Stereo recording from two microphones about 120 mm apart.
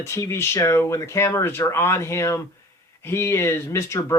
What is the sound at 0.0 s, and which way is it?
Speech, 25° left (ahead or behind).